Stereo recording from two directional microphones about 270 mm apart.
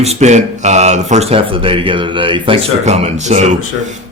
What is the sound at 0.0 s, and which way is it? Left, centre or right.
A man's voice, right.